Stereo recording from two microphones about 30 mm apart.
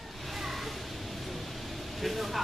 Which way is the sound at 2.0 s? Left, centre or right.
Centre.